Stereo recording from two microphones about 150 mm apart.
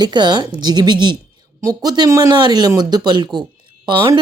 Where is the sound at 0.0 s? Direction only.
30° right (ahead or behind).